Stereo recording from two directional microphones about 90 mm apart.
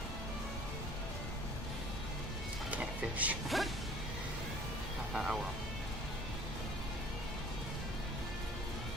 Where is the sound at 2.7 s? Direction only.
15° right (ahead or behind).